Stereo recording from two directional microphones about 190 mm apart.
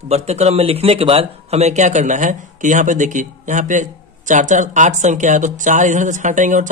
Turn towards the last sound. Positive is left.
turn(degrees=-40)  # may be behind; listen again after turning